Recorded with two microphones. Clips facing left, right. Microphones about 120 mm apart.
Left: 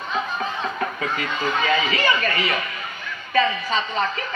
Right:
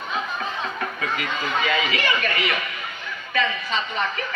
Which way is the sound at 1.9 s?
30° left (ahead or behind).